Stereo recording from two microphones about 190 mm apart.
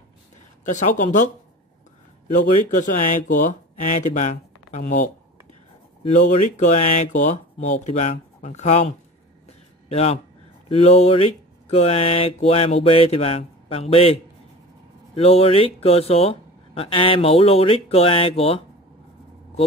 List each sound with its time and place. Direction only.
0.7 s speech: 40° left (ahead or behind)
2.7 s speech: 45° left (ahead or behind)
6.1 s speech: 40° left (ahead or behind)